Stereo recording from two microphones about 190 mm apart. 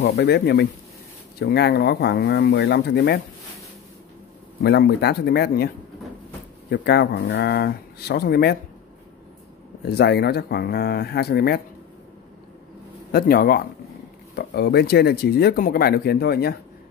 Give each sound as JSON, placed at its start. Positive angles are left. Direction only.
{"t": 0.0, "sound": "speech", "side_deg": 60}
{"t": 4.6, "sound": "speech", "side_deg": 60}
{"t": 6.7, "sound": "speech", "side_deg": 60}
{"t": 9.8, "sound": "speech", "side_deg": 60}
{"t": 13.1, "sound": "speech", "side_deg": 50}